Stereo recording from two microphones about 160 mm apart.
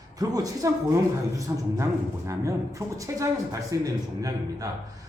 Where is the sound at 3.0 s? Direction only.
20° right (ahead or behind).